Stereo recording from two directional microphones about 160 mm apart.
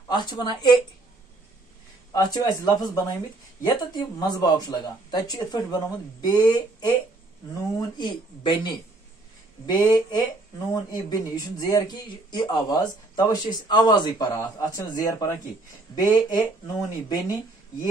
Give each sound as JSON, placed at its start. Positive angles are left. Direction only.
{"t": 0.1, "sound": "speech", "side_deg": 30}
{"t": 2.1, "sound": "speech", "side_deg": 25}
{"t": 8.0, "sound": "speech", "side_deg": 30}